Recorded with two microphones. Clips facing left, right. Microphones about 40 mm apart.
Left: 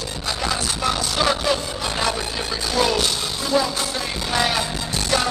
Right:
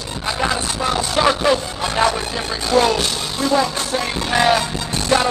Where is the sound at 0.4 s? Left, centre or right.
Right.